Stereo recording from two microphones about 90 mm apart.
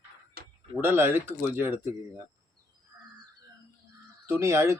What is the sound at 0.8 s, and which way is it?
Speech, 25° right (ahead or behind).